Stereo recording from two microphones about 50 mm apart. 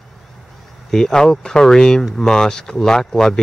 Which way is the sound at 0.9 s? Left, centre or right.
Centre.